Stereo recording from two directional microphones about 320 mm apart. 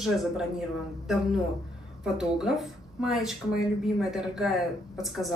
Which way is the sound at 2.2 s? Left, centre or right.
Centre.